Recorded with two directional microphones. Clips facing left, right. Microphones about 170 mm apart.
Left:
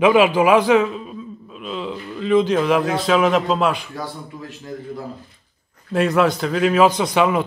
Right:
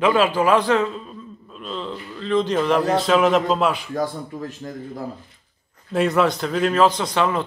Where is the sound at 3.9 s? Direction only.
45° right (ahead or behind).